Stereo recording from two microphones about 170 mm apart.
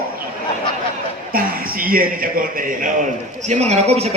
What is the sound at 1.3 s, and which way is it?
A man's voice, 60° right (ahead or behind).